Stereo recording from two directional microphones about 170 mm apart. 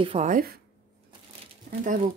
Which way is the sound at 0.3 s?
60° right (ahead or behind).